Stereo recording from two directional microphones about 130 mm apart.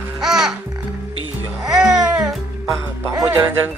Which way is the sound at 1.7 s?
5° right (ahead or behind).